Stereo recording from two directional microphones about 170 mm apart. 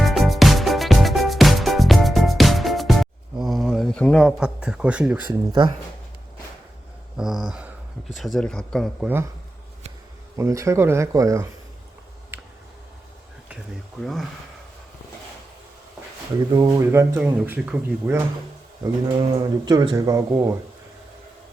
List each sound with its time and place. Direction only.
0.0 s music: centre (ahead or behind)
7.2 s speech: 5° right (ahead or behind)
10.3 s speech: 15° right (ahead or behind)
14.0 s speech: centre (ahead or behind)
16.6 s speech: 20° right (ahead or behind)
18.8 s speech: 25° right (ahead or behind)